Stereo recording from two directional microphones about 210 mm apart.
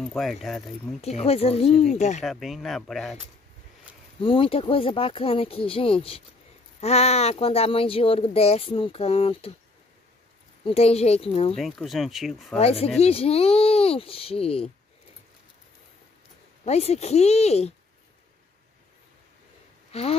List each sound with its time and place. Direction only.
0.1 s speech: centre (ahead or behind)
1.0 s speech: 30° left (ahead or behind)
2.2 s speech: centre (ahead or behind)
4.2 s speech: 25° left (ahead or behind)
10.6 s speech: 30° left (ahead or behind)
11.5 s speech: centre (ahead or behind)
12.5 s speech: 30° left (ahead or behind)
16.6 s speech: 30° left (ahead or behind)
19.9 s a sound: 30° left (ahead or behind)